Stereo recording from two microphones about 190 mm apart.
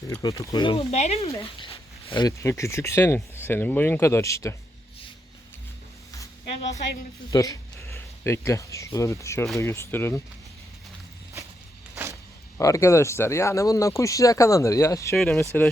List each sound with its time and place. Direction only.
0.1 s speech: 15° left (ahead or behind)
6.6 s a woman's voice: 35° left (ahead or behind)
7.3 s speech: 20° left (ahead or behind)
12.5 s speech: 15° left (ahead or behind)
15.1 s speech: centre (ahead or behind)